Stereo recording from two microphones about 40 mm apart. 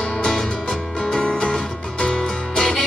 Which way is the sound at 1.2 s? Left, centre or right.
Left.